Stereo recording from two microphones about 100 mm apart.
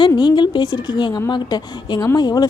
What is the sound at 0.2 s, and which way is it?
A woman's voice, 50° left (ahead or behind).